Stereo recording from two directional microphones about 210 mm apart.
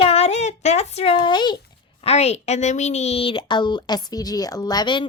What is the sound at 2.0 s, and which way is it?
A woman's voice, 30° left (ahead or behind).